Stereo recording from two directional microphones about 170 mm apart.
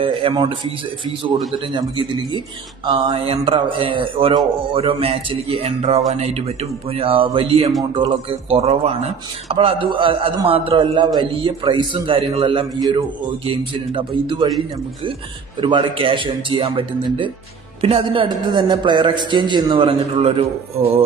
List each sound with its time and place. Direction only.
0.3 s a man's voice: 30° right (ahead or behind)
15.6 s a man's voice: 30° right (ahead or behind)